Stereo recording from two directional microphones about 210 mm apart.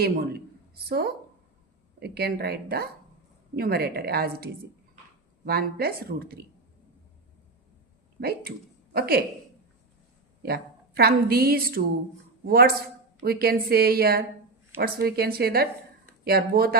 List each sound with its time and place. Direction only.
0.0 s a woman's voice: 50° right (ahead or behind)
5.5 s a woman's voice: 45° right (ahead or behind)
8.4 s speech: 50° right (ahead or behind)
10.4 s a woman's voice: 45° right (ahead or behind)